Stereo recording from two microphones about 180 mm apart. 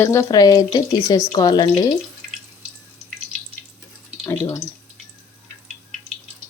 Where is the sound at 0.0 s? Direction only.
15° left (ahead or behind).